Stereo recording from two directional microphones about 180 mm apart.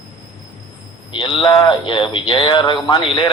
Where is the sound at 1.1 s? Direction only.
30° left (ahead or behind).